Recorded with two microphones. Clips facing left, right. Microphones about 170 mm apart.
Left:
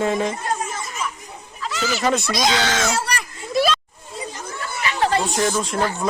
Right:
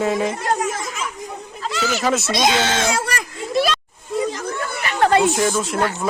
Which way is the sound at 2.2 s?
25° right (ahead or behind).